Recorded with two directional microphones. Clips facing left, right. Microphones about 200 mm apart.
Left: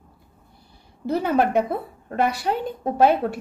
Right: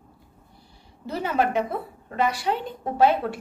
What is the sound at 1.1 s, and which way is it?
Speech, 50° left (ahead or behind).